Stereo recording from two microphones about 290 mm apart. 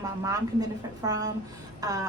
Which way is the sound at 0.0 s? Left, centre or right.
Centre.